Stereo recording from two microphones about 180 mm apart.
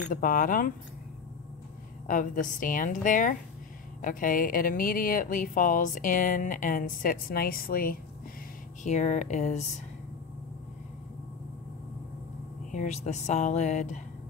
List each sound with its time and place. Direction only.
0.1 s speech: 50° left (ahead or behind)
2.0 s speech: 50° left (ahead or behind)
8.8 s speech: 40° left (ahead or behind)
12.7 s speech: 40° left (ahead or behind)